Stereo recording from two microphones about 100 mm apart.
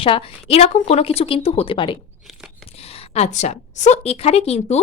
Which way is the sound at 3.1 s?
90° left.